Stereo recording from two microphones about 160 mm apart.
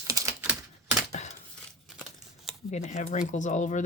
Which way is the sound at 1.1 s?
45° left (ahead or behind).